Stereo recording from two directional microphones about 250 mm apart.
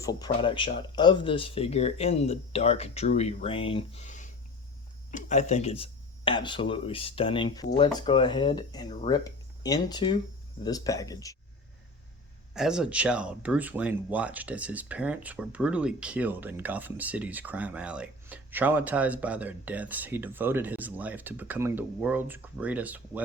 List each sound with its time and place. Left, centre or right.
0.0 s speech: centre
12.5 s speech: centre